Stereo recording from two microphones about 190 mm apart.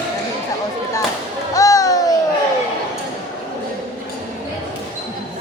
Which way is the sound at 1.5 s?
20° left (ahead or behind).